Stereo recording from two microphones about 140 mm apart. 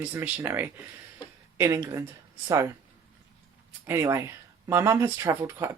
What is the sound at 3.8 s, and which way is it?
Speech, 20° right (ahead or behind).